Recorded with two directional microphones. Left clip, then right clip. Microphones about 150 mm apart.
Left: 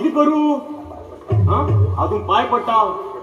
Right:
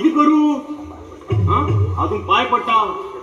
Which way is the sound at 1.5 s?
15° right (ahead or behind).